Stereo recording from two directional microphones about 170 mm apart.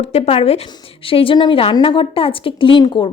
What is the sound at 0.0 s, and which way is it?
Speech, 35° left (ahead or behind).